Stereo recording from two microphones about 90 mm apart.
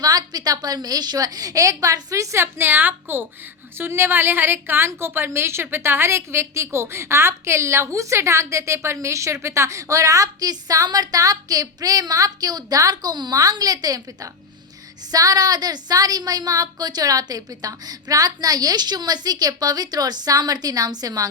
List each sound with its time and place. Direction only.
0.0 s a woman's voice: 45° right (ahead or behind)